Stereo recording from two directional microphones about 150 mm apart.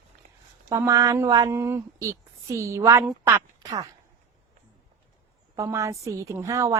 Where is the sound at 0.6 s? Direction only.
20° right (ahead or behind).